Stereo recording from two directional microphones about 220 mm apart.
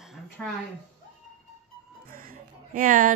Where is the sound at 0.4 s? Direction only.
Centre (ahead or behind).